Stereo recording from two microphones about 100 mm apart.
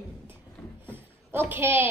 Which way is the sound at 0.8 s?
20° right (ahead or behind).